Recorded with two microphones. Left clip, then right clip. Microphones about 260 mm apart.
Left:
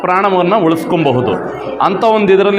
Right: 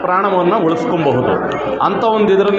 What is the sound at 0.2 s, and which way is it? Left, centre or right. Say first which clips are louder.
Speech: left 3 dB; left.